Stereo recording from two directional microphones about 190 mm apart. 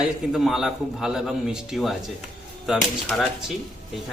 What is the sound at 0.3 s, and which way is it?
A man's voice, centre (ahead or behind).